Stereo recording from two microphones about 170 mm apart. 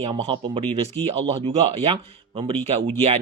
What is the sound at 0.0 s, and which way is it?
Speech, 35° right (ahead or behind).